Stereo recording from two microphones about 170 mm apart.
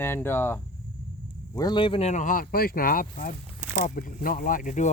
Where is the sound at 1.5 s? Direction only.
25° left (ahead or behind).